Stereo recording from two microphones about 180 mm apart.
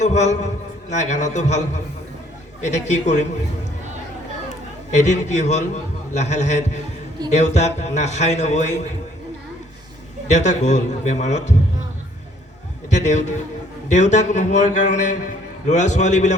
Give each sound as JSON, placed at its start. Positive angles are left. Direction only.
{"t": 0.0, "sound": "a man's voice", "side_deg": 40}
{"t": 2.6, "sound": "a man's voice", "side_deg": 40}
{"t": 4.4, "sound": "a sound", "side_deg": 40}
{"t": 6.1, "sound": "a man's voice", "side_deg": 40}
{"t": 10.3, "sound": "a man's voice", "side_deg": 40}
{"t": 12.9, "sound": "a man's voice", "side_deg": 40}